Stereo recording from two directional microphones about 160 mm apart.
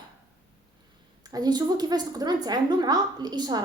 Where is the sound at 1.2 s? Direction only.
25° right (ahead or behind).